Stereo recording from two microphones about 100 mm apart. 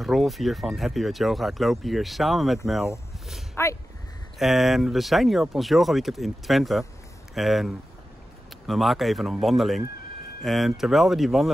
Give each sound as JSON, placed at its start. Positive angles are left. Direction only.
{"t": 0.0, "sound": "speech", "side_deg": 0}
{"t": 3.6, "sound": "speech", "side_deg": 25}
{"t": 4.4, "sound": "speech", "side_deg": 0}